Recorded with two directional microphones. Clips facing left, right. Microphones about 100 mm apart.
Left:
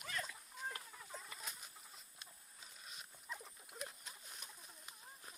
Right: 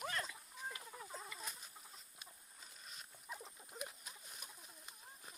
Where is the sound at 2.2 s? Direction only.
5° right (ahead or behind).